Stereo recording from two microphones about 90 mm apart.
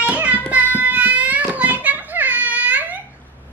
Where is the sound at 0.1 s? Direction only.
15° right (ahead or behind).